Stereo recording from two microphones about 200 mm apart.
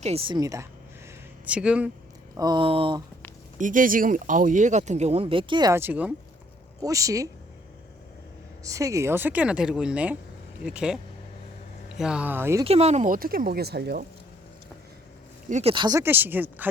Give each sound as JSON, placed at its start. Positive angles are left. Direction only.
{"t": 0.0, "sound": "speech", "side_deg": -30}
{"t": 1.5, "sound": "speech", "side_deg": -5}
{"t": 2.3, "sound": "speech", "side_deg": -20}
{"t": 3.6, "sound": "speech", "side_deg": -40}
{"t": 8.6, "sound": "speech", "side_deg": -15}
{"t": 12.6, "sound": "speech", "side_deg": -30}
{"t": 15.4, "sound": "speech", "side_deg": -35}
{"t": 15.7, "sound": "speech", "side_deg": -20}